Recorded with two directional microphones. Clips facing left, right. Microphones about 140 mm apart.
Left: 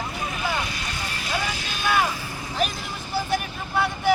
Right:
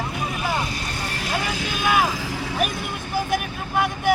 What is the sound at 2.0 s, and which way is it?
Vehicle, 90° right.